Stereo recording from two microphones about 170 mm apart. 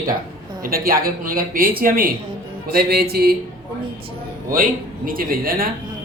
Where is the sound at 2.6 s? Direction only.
65° right (ahead or behind).